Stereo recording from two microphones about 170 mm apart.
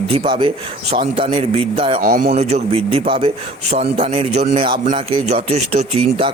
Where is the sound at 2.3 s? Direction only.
40° right (ahead or behind).